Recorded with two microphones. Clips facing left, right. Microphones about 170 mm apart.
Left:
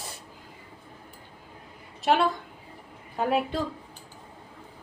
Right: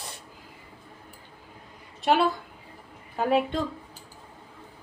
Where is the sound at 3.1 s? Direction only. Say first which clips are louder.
Right 2 dB; centre (ahead or behind).